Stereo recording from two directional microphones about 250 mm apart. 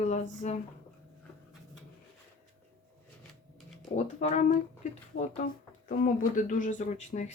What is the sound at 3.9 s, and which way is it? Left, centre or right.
Music, left.